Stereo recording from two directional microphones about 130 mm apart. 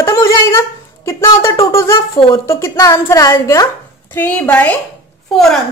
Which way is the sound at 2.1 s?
45° left (ahead or behind).